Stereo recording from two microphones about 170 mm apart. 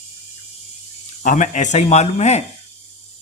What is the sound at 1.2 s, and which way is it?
A man's voice, 50° left (ahead or behind).